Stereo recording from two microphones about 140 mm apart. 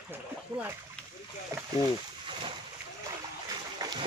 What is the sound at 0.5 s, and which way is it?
Speech, 20° right (ahead or behind).